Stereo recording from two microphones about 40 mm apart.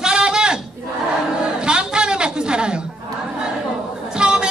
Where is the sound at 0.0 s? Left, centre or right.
Centre.